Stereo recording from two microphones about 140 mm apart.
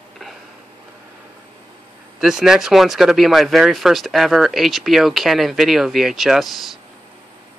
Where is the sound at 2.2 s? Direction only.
5° right (ahead or behind).